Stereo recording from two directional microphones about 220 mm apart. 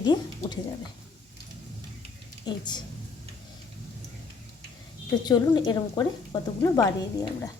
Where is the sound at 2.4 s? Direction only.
20° left (ahead or behind).